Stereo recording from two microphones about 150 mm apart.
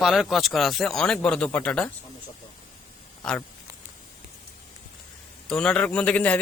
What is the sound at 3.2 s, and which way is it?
Speech, 5° left (ahead or behind).